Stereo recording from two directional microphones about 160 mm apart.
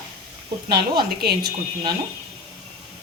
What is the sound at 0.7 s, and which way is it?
Speech, 80° right.